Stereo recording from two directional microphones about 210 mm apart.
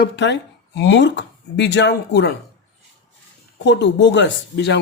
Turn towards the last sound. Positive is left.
turn(degrees=55)  # may be behind; listen again after turning